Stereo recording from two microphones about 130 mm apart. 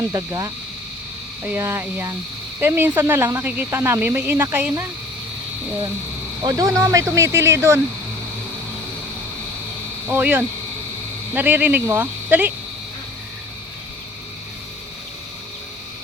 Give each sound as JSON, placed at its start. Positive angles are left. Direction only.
{"t": 0.1, "sound": "speech", "side_deg": -30}
{"t": 6.4, "sound": "speech", "side_deg": -25}
{"t": 10.1, "sound": "speech", "side_deg": -15}